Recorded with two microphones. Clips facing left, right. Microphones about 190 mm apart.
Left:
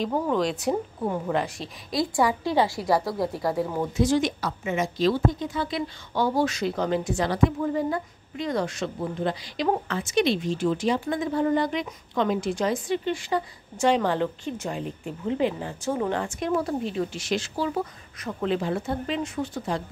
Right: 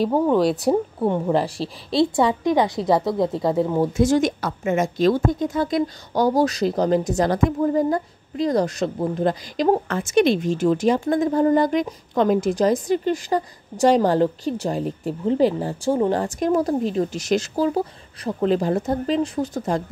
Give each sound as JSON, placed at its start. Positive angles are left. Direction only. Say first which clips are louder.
{"t": 0.0, "sound": "a woman's voice", "louder": "right 7 dB", "side_deg": -35}
{"t": 3.9, "sound": "a woman's voice", "louder": "right 4 dB", "side_deg": -45}